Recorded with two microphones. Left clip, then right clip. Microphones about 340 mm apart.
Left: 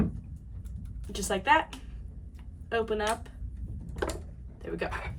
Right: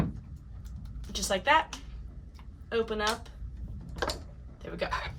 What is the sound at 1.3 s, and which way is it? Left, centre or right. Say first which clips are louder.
A woman's voice: even; centre.